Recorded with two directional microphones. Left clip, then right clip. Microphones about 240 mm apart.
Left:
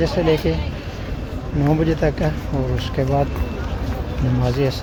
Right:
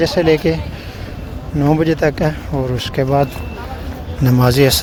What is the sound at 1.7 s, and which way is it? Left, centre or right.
Speech, right.